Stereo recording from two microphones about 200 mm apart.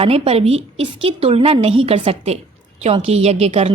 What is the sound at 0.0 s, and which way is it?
A woman's voice, 30° right (ahead or behind).